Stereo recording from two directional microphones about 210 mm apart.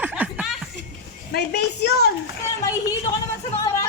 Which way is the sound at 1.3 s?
50° left (ahead or behind).